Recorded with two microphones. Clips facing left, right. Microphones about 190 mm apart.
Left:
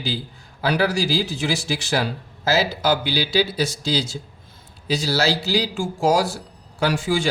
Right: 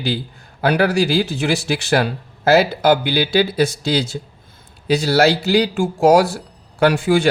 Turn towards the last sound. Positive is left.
turn(degrees=-60)  # may be behind; listen again after turning